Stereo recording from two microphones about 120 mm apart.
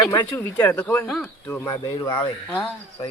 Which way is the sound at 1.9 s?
40° left (ahead or behind).